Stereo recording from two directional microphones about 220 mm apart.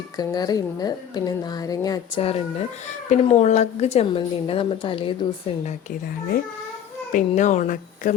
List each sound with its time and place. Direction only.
0.2 s a woman's voice: 20° left (ahead or behind)
7.1 s speech: 35° left (ahead or behind)